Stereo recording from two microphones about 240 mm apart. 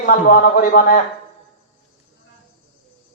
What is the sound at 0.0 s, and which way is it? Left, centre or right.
A man's voice, left.